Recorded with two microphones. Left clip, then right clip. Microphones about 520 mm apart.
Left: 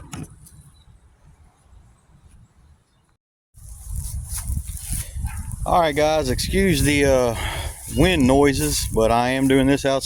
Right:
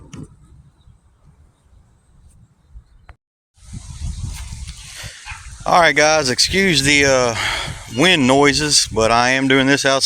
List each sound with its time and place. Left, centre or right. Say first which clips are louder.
5.6 s speech: right 5 dB; left